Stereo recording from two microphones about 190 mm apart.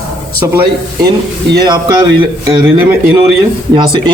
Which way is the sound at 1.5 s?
20° right (ahead or behind).